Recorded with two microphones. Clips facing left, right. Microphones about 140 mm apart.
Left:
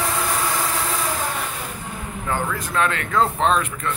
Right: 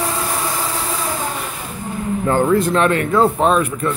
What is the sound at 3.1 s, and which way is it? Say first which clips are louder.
Speech: right 5 dB; 10° right (ahead or behind).